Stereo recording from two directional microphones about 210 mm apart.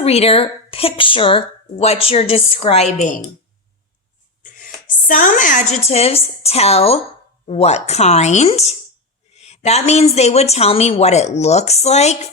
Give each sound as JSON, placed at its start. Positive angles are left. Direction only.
{"t": 0.0, "sound": "speech", "side_deg": 30}
{"t": 4.4, "sound": "a woman's voice", "side_deg": 40}